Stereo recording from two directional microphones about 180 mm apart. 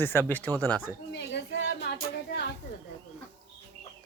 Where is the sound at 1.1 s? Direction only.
70° left (ahead or behind).